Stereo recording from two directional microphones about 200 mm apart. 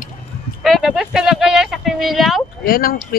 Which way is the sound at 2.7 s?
45° left (ahead or behind).